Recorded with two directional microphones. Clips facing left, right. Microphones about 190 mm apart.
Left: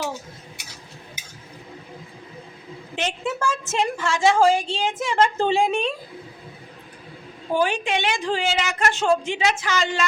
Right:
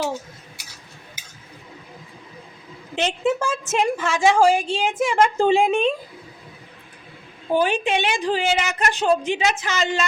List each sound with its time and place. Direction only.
2.9 s a woman's voice: 20° right (ahead or behind)
7.5 s a woman's voice: 20° right (ahead or behind)